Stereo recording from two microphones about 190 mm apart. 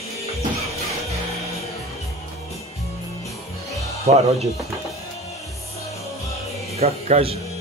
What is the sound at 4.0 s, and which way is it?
Speech, 35° right (ahead or behind).